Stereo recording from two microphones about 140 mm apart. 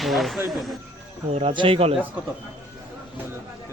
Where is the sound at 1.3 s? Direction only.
40° right (ahead or behind).